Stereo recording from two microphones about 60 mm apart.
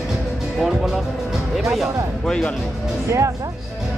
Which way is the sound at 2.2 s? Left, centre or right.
Centre.